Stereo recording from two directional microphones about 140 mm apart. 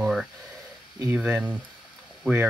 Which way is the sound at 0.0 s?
5° right (ahead or behind).